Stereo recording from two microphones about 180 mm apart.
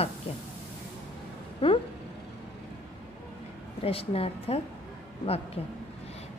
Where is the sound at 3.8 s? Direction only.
30° left (ahead or behind).